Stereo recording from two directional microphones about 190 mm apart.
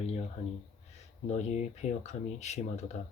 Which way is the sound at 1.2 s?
35° left (ahead or behind).